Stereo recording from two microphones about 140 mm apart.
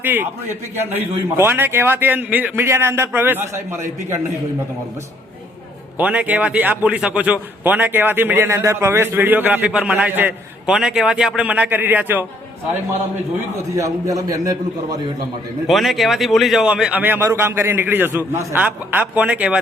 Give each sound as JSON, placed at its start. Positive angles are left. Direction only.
{"t": 0.0, "sound": "a man's voice", "side_deg": -15}
{"t": 6.0, "sound": "a man's voice", "side_deg": -10}
{"t": 13.7, "sound": "a man's voice", "side_deg": -25}
{"t": 15.6, "sound": "a man's voice", "side_deg": 0}